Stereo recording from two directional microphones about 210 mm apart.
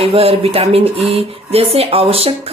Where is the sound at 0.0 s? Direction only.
30° right (ahead or behind).